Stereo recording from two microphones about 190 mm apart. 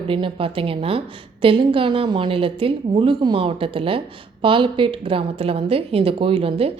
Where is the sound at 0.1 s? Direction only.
30° right (ahead or behind).